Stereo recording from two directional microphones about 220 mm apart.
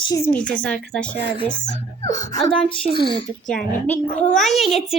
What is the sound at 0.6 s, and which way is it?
Speech, 5° left (ahead or behind).